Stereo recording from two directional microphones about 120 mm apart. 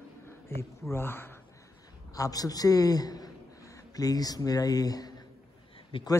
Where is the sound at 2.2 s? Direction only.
30° left (ahead or behind).